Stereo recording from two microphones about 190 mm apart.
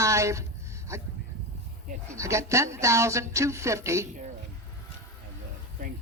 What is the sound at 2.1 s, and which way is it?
A man's voice, 15° right (ahead or behind).